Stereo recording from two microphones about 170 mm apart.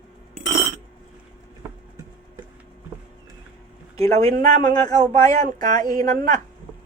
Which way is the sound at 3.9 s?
35° right (ahead or behind).